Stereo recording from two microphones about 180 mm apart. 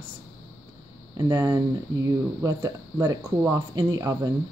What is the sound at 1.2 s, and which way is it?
Speech, 20° right (ahead or behind).